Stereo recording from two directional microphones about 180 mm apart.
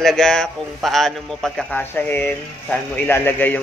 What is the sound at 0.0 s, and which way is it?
A man's voice, centre (ahead or behind).